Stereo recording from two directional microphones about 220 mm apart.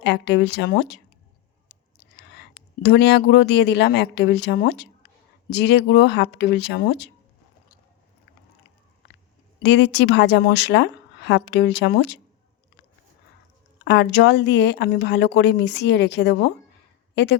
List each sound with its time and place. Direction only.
0.0 s speech: 50° left (ahead or behind)
2.1 s whispering: 50° left (ahead or behind)
2.8 s speech: 50° left (ahead or behind)
9.6 s speech: 50° left (ahead or behind)
13.8 s speech: 50° left (ahead or behind)